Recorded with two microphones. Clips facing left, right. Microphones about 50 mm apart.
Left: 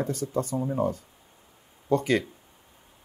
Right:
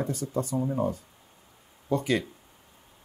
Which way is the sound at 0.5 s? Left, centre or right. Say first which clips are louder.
Right 1 dB; centre.